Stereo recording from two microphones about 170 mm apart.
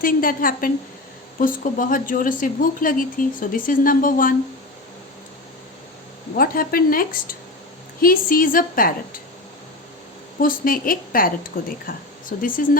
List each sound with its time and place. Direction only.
0.0 s a woman's voice: 55° left (ahead or behind)
6.3 s a woman's voice: 60° left (ahead or behind)
10.4 s a woman's voice: 55° left (ahead or behind)